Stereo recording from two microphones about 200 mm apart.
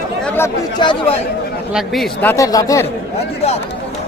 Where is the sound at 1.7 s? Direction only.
Centre (ahead or behind).